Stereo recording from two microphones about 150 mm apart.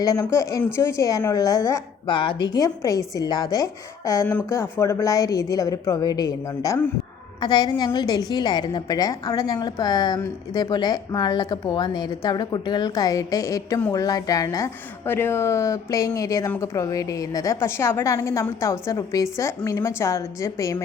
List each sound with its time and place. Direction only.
0.0 s a woman's voice: 20° left (ahead or behind)
2.0 s a woman's voice: 35° left (ahead or behind)